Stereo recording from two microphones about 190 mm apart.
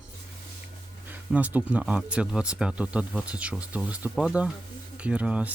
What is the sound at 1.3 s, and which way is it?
Speech, 5° right (ahead or behind).